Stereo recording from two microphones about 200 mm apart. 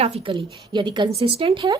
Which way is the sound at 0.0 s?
30° right (ahead or behind).